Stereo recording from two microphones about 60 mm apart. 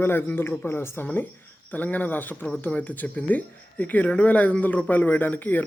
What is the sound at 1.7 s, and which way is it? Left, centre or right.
Speech, left.